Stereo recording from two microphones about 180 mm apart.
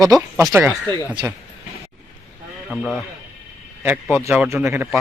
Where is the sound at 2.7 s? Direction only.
5° left (ahead or behind).